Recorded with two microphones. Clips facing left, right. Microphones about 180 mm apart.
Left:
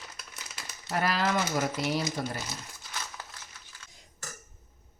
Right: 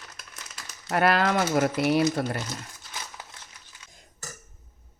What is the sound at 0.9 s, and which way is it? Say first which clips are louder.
Speech: right 6 dB; 65° right (ahead or behind).